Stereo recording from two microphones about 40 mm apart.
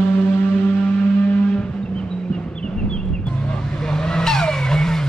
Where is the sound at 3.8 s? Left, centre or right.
Centre.